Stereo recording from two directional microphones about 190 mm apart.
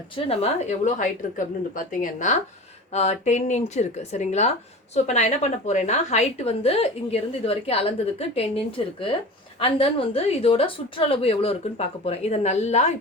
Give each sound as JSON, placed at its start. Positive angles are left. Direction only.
{"t": 0.3, "sound": "a woman's voice", "side_deg": 35}